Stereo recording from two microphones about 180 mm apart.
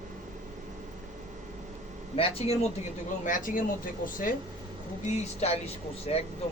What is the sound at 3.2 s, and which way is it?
Speech, 50° left (ahead or behind).